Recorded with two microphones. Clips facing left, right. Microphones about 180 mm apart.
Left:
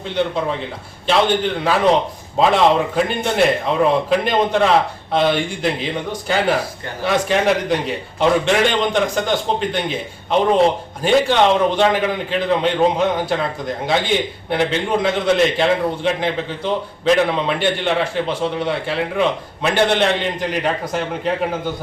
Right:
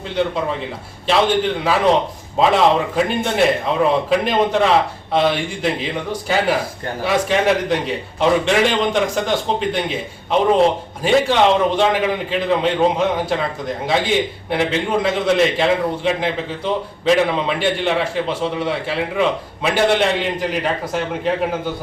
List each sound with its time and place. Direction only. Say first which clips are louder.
1.1 s a man's voice: even; centre (ahead or behind)
2.4 s a man's voice: even; centre (ahead or behind)